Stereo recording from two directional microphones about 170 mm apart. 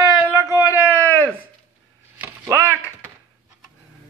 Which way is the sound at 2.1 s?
15° right (ahead or behind).